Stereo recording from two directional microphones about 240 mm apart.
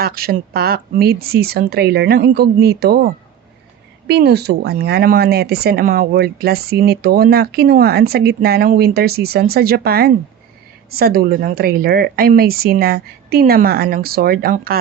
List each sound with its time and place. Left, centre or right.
0.0 s speech: right